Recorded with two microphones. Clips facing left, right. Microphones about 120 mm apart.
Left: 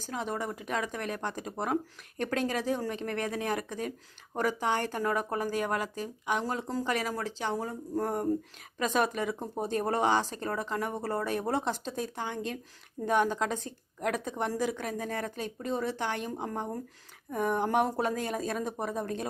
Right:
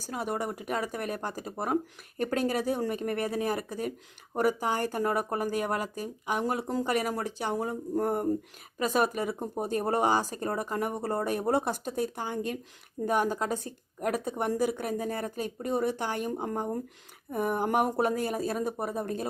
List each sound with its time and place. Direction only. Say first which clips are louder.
0.0 s speech: right 2 dB; 10° right (ahead or behind)
12.2 s speech: right 2 dB; 45° right (ahead or behind)
13.1 s speech: even; 10° right (ahead or behind)